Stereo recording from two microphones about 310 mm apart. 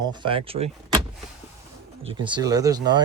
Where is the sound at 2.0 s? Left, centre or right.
Centre.